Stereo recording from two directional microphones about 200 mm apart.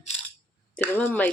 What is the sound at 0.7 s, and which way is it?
Speech, 10° left (ahead or behind).